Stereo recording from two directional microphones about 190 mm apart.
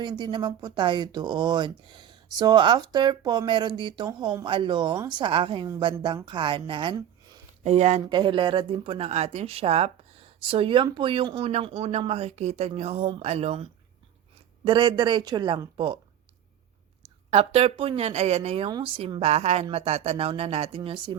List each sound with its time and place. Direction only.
0.0 s speech: 25° right (ahead or behind)
17.3 s speech: 30° right (ahead or behind)